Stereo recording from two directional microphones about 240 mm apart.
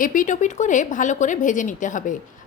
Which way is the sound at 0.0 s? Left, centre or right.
Left.